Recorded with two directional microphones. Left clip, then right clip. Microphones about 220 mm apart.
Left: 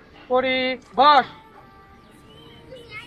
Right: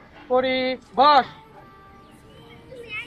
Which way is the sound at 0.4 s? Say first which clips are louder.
Left 1 dB; 15° right (ahead or behind).